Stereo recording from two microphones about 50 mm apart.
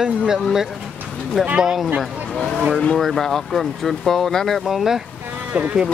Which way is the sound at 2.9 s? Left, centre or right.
Centre.